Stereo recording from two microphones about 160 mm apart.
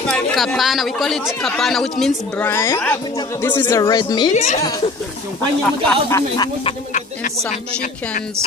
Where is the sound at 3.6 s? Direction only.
25° left (ahead or behind).